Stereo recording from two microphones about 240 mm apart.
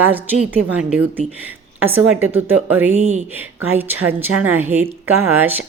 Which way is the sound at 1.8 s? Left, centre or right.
Centre.